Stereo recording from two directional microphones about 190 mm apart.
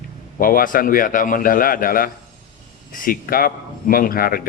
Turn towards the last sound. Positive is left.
turn(degrees=50)  # may be behind; listen again after turning